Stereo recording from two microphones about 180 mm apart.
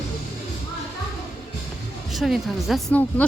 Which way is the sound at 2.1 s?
Centre (ahead or behind).